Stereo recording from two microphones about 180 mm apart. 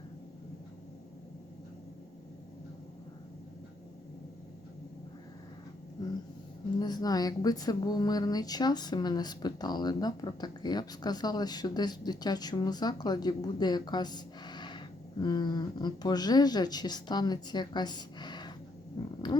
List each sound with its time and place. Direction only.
6.7 s speech: 20° left (ahead or behind)